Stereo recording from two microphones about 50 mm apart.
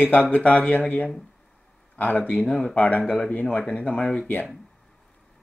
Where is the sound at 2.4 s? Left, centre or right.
Centre.